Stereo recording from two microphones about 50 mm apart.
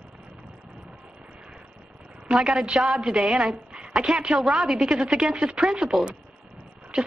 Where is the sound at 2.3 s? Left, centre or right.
Centre.